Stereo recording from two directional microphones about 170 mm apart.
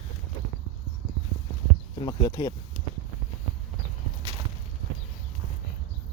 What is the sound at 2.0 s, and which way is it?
Speech, 25° left (ahead or behind).